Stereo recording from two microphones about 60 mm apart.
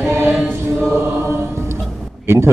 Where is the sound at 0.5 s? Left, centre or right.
Right.